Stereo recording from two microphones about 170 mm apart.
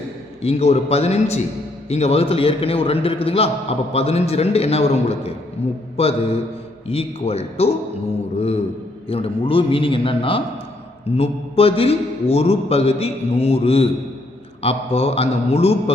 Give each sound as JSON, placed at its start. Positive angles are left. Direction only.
{"t": 0.4, "sound": "a man's voice", "side_deg": 40}
{"t": 9.0, "sound": "a man's voice", "side_deg": 35}